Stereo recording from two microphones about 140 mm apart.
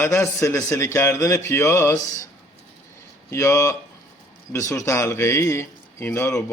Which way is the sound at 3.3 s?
20° left (ahead or behind).